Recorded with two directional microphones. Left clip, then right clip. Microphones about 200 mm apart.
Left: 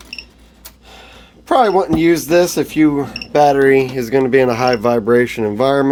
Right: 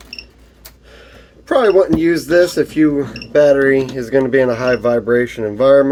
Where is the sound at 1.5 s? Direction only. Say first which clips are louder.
Right 1 dB; 45° left (ahead or behind).